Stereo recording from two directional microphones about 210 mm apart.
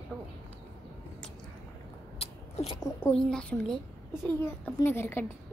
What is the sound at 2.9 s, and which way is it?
A woman's voice, 5° left (ahead or behind).